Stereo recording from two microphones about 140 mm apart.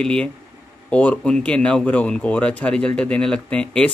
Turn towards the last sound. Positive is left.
turn(degrees=10)  # may be behind; listen again after turning